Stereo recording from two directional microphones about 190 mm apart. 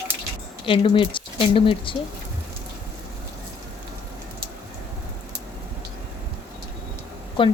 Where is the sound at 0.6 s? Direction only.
25° left (ahead or behind).